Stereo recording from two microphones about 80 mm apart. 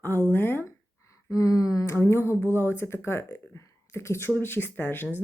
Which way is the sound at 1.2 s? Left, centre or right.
Left.